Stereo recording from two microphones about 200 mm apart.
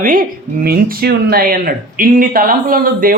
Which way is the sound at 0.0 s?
45° right (ahead or behind).